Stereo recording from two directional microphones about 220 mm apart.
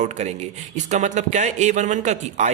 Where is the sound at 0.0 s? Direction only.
30° right (ahead or behind).